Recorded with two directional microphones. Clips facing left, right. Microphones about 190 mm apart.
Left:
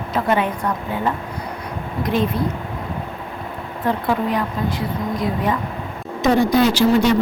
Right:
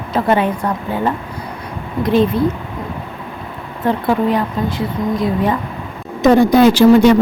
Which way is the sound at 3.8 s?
25° right (ahead or behind).